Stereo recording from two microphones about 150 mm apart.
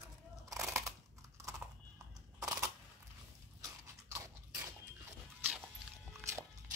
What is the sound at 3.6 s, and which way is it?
Crunch, 20° right (ahead or behind).